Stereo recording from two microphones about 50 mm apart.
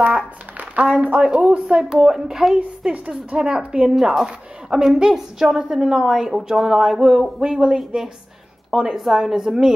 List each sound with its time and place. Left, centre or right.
1.0 s speech: right
1.9 s a woman's voice: centre